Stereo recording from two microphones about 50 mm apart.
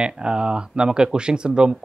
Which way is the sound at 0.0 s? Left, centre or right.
Centre.